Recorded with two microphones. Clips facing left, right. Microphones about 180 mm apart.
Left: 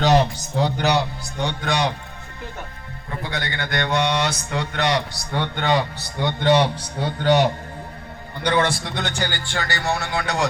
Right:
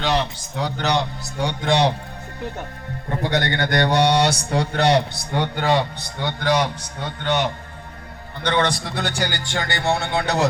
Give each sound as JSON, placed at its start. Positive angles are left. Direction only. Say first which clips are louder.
{"t": 0.0, "sound": "a man's voice", "louder": "left 5 dB", "side_deg": 45}
{"t": 0.8, "sound": "a man's voice", "louder": "even", "side_deg": 10}
{"t": 1.2, "sound": "speech", "louder": "right 1 dB", "side_deg": -10}
{"t": 1.6, "sound": "speech", "louder": "right 5 dB", "side_deg": -25}
{"t": 3.1, "sound": "speech", "louder": "right 7 dB", "side_deg": -70}
{"t": 3.6, "sound": "speech", "louder": "right 3 dB", "side_deg": -40}
{"t": 5.5, "sound": "speech", "louder": "right 1 dB", "side_deg": -5}
{"t": 6.1, "sound": "a man's voice", "louder": "left 3 dB", "side_deg": 20}
{"t": 8.4, "sound": "a man's voice", "louder": "even", "side_deg": 5}
{"t": 9.0, "sound": "speech", "louder": "right 1 dB", "side_deg": -10}